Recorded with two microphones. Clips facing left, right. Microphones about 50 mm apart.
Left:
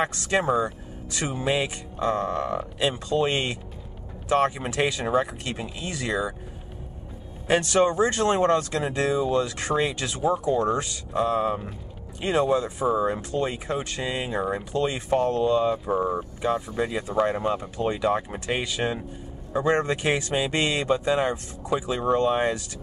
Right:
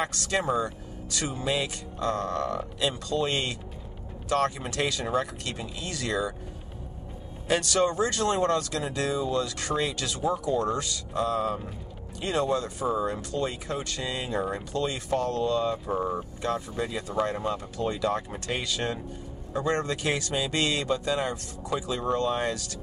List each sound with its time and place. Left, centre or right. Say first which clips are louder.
0.0 s speech: left 4 dB; left
7.4 s speech: left 4 dB; left